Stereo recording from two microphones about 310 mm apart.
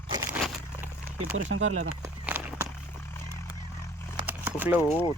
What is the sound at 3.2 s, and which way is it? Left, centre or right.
Vehicle, centre.